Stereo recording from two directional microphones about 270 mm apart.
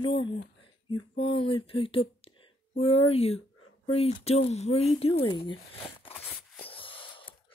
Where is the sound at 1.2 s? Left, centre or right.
Centre.